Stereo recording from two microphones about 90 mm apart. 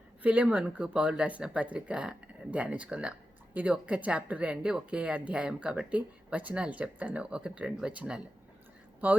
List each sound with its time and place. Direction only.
0.2 s speech: 15° right (ahead or behind)